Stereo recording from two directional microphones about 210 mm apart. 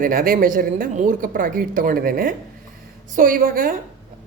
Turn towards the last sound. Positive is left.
turn(degrees=-40)  # may be behind; listen again after turning